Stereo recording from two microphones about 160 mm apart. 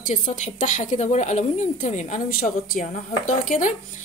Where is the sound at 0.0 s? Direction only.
50° left (ahead or behind).